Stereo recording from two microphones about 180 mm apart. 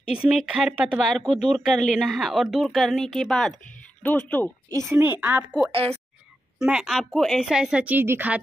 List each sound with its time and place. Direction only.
0.1 s speech: 5° right (ahead or behind)
4.9 s a woman's voice: 10° right (ahead or behind)
5.7 s speech: 30° right (ahead or behind)
6.6 s speech: 5° right (ahead or behind)